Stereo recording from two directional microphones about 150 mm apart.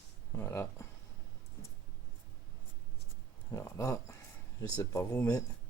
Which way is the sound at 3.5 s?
20° left (ahead or behind).